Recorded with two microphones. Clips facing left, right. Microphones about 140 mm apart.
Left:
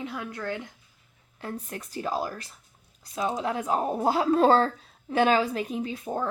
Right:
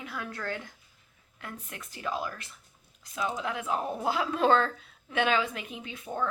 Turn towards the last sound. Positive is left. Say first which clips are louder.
# left 5 dB
turn(degrees=35)  # may be behind; listen again after turning